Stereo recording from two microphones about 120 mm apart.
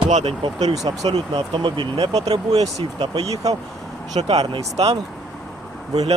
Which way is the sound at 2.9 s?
55° right (ahead or behind).